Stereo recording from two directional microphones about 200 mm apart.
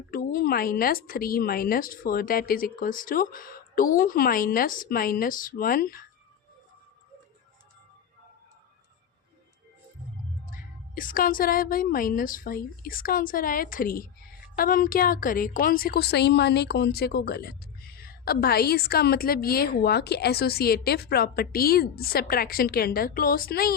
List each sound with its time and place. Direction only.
0.1 s a woman's voice: 45° left (ahead or behind)
10.5 s a woman's voice: 45° left (ahead or behind)